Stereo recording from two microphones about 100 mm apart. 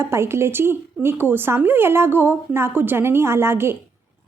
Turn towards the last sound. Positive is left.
turn(degrees=-25)  # may be behind; listen again after turning